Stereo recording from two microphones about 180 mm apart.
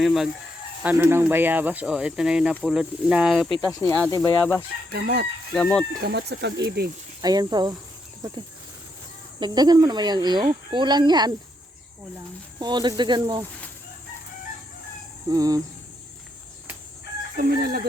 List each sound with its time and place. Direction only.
0.0 s speech: centre (ahead or behind)
3.8 s speech: 10° left (ahead or behind)
4.9 s speech: 60° right (ahead or behind)
5.5 s speech: 5° left (ahead or behind)
6.0 s speech: 65° right (ahead or behind)
7.2 s speech: 20° right (ahead or behind)
9.4 s speech: 20° right (ahead or behind)
12.5 s speech: 25° right (ahead or behind)
15.3 s speech: 20° right (ahead or behind)
17.3 s speech: 60° right (ahead or behind)